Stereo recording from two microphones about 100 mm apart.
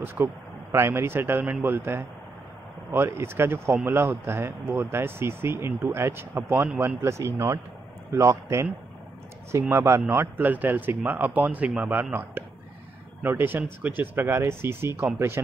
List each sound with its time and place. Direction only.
0.0 s a man's voice: 25° right (ahead or behind)